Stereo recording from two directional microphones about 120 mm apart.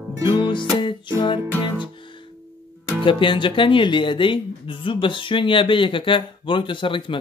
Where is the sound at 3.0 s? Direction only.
45° left (ahead or behind).